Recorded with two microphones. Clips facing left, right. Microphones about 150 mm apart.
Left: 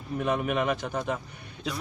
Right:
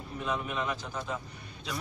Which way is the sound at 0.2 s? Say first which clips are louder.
Left 6 dB; 60° left (ahead or behind).